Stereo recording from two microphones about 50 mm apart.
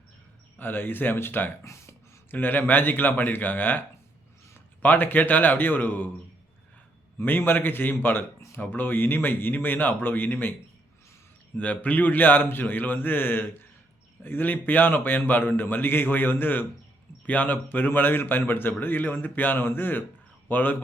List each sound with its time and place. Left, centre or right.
0.6 s a man's voice: left
1.6 s a sound: left
2.3 s a man's voice: left
7.2 s a man's voice: left
11.5 s a man's voice: left